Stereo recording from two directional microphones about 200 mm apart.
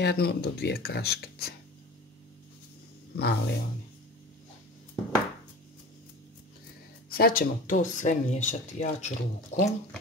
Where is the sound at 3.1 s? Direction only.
55° left (ahead or behind).